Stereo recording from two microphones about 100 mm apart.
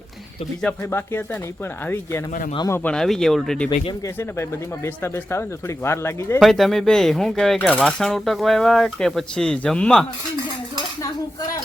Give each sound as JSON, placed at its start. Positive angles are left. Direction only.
{"t": 0.8, "sound": "speech", "side_deg": 25}
{"t": 2.8, "sound": "speech", "side_deg": 5}
{"t": 4.0, "sound": "speech", "side_deg": 30}
{"t": 6.4, "sound": "speech", "side_deg": 0}